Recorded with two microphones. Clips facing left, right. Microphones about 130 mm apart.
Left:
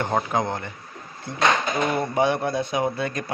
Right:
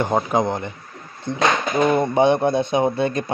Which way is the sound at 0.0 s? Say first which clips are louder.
Right 4 dB; 15° right (ahead or behind).